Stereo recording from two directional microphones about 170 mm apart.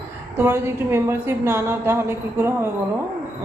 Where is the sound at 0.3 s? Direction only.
15° right (ahead or behind).